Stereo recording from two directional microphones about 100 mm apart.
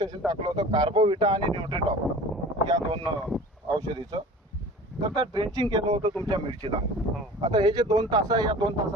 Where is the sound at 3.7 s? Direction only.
45° right (ahead or behind).